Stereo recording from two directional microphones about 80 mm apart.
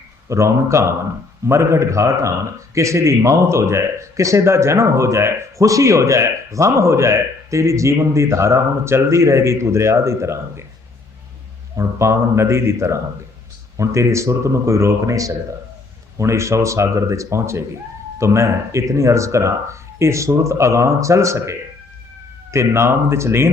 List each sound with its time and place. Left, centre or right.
0.3 s speech: right
11.8 s speech: right